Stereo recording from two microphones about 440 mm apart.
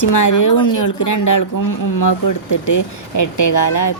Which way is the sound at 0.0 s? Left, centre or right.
Left.